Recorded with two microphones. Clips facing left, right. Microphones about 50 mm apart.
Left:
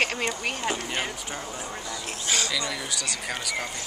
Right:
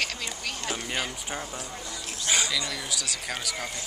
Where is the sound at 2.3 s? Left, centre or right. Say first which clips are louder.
Right 1 dB; centre.